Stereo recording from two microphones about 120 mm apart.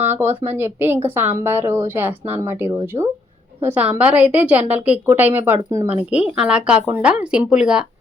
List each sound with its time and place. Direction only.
0.0 s a woman's voice: 15° right (ahead or behind)